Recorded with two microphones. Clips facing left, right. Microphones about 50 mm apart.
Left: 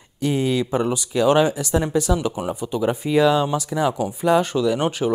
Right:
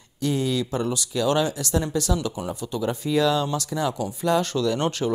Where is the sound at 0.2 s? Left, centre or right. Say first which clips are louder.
Left 3 dB; left.